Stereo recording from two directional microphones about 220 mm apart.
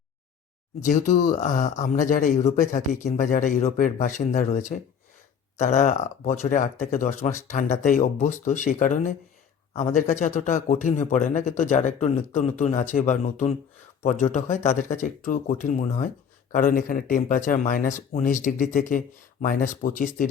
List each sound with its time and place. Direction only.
0.9 s speech: 35° left (ahead or behind)